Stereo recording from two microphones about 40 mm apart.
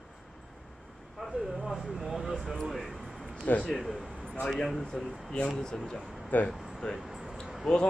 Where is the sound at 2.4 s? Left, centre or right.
Centre.